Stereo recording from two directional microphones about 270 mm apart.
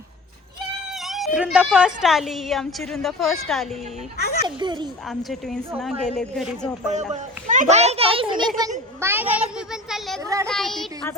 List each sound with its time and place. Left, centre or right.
0.9 s yodeling: centre
1.4 s a woman's voice: centre
4.4 s a child's voice: centre
5.0 s a woman's voice: centre
6.9 s a child's voice: right
10.4 s a woman's voice: centre